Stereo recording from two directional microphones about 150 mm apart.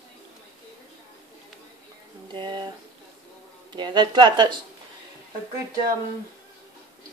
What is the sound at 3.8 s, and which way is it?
Speech, 30° right (ahead or behind).